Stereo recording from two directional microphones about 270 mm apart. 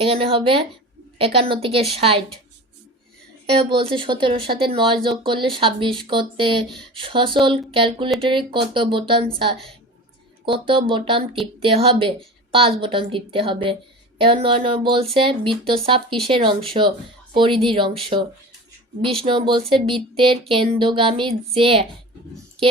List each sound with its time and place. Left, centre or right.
0.0 s a woman's voice: centre
3.8 s a woman's voice: centre